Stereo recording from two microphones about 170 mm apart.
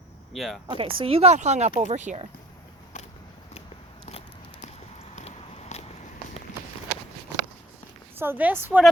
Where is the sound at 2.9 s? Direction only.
45° left (ahead or behind).